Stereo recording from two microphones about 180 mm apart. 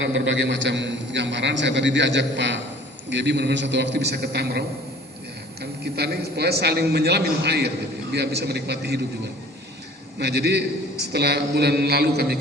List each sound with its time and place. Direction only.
0.1 s a man's voice: 80° right
10.2 s a man's voice: 65° right (ahead or behind)